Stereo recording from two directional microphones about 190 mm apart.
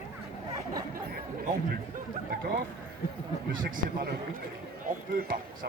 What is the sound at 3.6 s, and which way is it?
Speech, 45° right (ahead or behind).